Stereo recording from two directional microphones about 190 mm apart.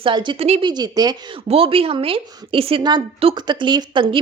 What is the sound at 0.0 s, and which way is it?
Speech, 25° right (ahead or behind).